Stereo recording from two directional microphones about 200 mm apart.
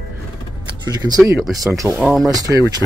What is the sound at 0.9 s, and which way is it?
Speech, 20° right (ahead or behind).